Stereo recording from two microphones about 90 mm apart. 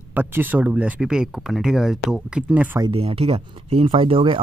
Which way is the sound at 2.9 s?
90° right.